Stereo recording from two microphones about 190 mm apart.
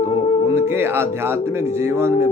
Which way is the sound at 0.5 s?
10° right (ahead or behind).